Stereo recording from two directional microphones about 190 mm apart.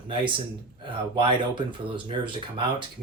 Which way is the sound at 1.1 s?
25° right (ahead or behind).